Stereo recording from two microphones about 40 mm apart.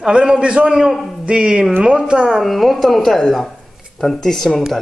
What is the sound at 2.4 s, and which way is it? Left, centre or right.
A woman's voice, centre.